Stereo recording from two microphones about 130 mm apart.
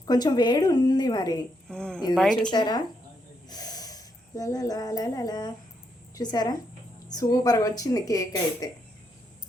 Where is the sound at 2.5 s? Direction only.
35° left (ahead or behind).